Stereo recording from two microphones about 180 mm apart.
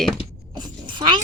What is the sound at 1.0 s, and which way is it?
Speech, 25° right (ahead or behind).